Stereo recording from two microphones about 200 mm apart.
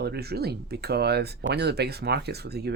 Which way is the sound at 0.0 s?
55° right (ahead or behind).